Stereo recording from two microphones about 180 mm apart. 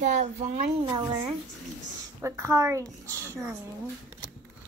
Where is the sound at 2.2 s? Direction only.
15° right (ahead or behind).